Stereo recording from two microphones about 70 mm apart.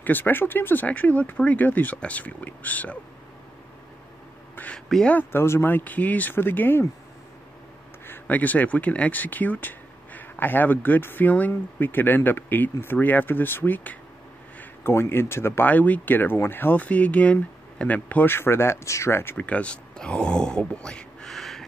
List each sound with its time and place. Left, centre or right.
0.0 s speech: left
4.7 s speech: centre
5.3 s speech: left
8.1 s speech: left
15.7 s speech: left
19.3 s speech: centre